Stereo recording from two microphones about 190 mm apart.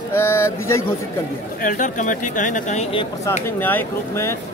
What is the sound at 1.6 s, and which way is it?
Speech, 45° left (ahead or behind).